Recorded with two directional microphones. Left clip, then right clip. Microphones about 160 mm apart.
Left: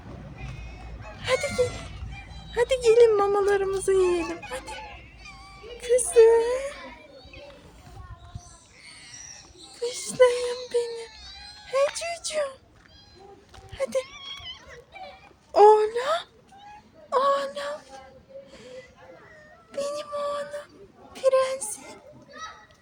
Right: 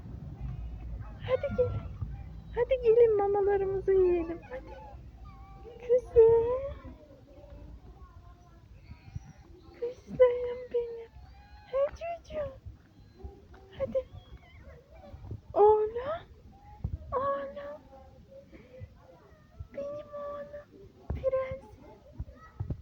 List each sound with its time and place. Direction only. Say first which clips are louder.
1.2 s fowl: left 5 dB; 15° left (ahead or behind)
2.5 s speech: left 5 dB; 15° left (ahead or behind)
6.1 s speech: left 5 dB; 15° left (ahead or behind)
10.2 s speech: left 4 dB; 10° left (ahead or behind)
11.6 s music: left 6 dB; 10° left (ahead or behind)
13.7 s speech: left 5 dB; 10° left (ahead or behind)
15.5 s speech: left 7 dB; 25° left (ahead or behind)
17.1 s a sound: left 9 dB; 15° left (ahead or behind)
19.7 s speech: left 8 dB; 15° left (ahead or behind)